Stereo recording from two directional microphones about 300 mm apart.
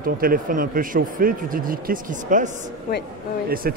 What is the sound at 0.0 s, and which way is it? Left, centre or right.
A man's voice, right.